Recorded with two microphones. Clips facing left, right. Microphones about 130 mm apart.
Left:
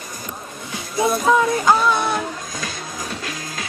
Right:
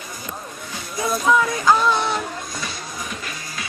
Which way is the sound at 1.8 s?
10° left (ahead or behind).